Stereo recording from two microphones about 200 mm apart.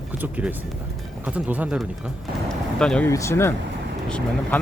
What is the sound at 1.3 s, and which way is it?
Speech, 10° right (ahead or behind).